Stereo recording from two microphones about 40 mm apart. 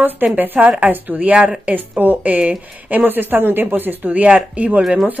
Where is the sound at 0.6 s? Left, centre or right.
Right.